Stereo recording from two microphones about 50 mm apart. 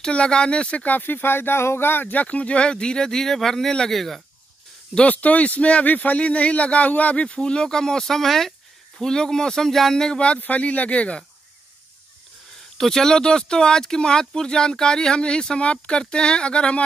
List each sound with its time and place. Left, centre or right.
0.0 s speech: centre
0.8 s speech: left
2.2 s speech: left; by 4.2 s centre
5.0 s speech: left
7.2 s speech: centre
9.0 s speech: centre
12.7 s speech: centre